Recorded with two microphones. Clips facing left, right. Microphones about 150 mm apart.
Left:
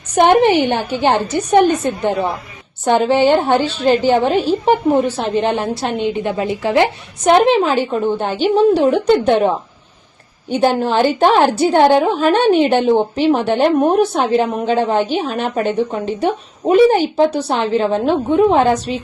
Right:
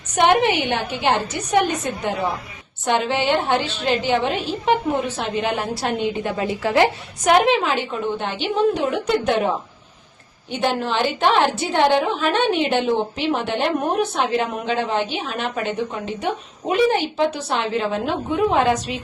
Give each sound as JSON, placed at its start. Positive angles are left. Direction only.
{"t": 0.2, "sound": "a woman's voice", "side_deg": 40}
{"t": 10.5, "sound": "a woman's voice", "side_deg": 40}